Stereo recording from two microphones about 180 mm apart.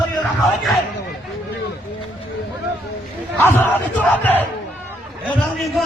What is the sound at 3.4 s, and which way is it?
Battle cry, 10° left (ahead or behind).